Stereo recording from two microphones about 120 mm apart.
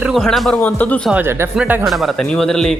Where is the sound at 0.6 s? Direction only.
15° left (ahead or behind).